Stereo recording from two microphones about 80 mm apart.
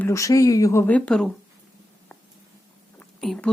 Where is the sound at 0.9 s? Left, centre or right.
Centre.